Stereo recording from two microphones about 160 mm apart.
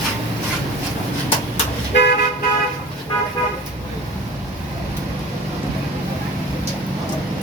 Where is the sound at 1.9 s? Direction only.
90° left.